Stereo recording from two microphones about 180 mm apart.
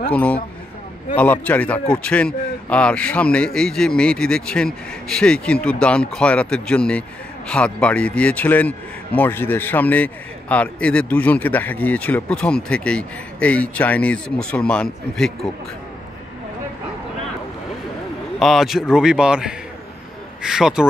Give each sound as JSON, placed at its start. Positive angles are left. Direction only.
{"t": 0.1, "sound": "speech", "side_deg": 5}
{"t": 18.4, "sound": "a man's voice", "side_deg": 0}